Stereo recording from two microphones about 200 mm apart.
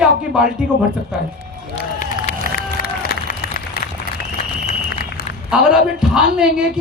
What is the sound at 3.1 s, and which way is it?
Run, 50° left (ahead or behind).